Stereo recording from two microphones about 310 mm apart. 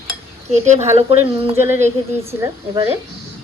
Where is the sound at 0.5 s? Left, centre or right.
Right.